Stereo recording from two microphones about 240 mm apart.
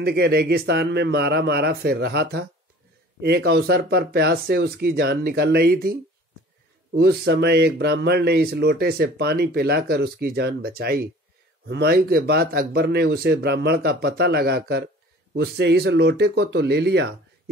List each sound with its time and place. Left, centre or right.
0.0 s speech: right